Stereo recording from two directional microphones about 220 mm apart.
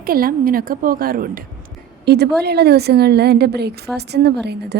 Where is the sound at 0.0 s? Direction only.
40° right (ahead or behind).